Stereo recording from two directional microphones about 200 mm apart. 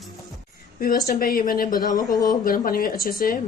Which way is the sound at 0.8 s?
50° left (ahead or behind).